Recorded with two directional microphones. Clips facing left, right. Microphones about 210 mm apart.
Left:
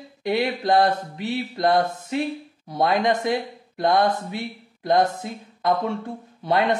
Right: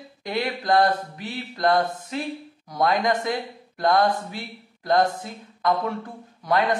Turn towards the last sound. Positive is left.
turn(degrees=25)  # may be behind; listen again after turning